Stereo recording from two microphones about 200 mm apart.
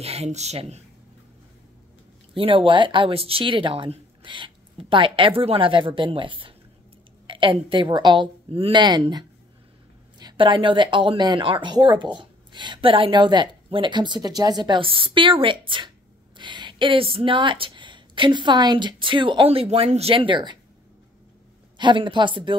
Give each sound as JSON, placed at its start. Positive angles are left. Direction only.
{"t": 0.0, "sound": "speech", "side_deg": -30}
{"t": 2.3, "sound": "speech", "side_deg": -25}
{"t": 21.7, "sound": "speech", "side_deg": -25}